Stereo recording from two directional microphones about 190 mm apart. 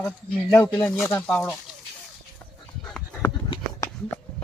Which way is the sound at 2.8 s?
5° left (ahead or behind).